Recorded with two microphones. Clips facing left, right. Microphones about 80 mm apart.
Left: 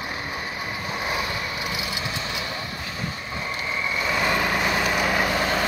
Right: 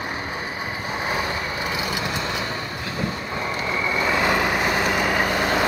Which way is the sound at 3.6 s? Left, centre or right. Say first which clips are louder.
Right 4 dB; right.